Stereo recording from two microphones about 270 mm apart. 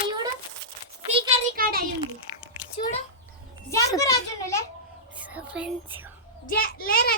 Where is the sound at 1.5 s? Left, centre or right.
Right.